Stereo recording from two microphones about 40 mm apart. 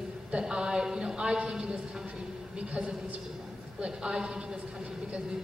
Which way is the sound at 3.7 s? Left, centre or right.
Centre.